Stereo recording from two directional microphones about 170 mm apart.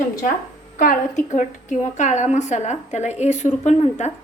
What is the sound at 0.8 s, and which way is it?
A woman's voice, 50° left (ahead or behind).